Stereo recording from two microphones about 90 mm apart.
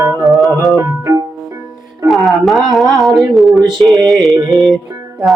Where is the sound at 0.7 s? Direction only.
30° right (ahead or behind).